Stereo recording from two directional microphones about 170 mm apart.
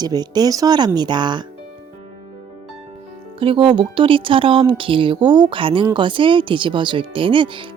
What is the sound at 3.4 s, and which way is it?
Speech, 30° right (ahead or behind).